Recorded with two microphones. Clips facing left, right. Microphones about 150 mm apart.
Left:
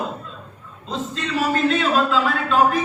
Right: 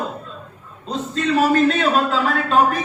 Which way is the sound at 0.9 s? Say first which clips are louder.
Right 5 dB; 40° right (ahead or behind).